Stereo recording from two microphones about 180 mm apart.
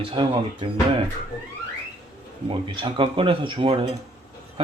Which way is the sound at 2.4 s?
30° right (ahead or behind).